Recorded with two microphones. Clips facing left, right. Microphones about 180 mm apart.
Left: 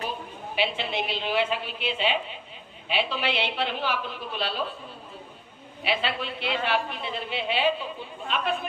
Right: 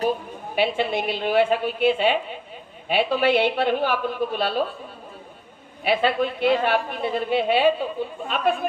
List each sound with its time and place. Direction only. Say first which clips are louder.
0.0 s a woman's voice: right 9 dB; 50° right (ahead or behind)
5.8 s a woman's voice: right 8 dB; 50° right (ahead or behind)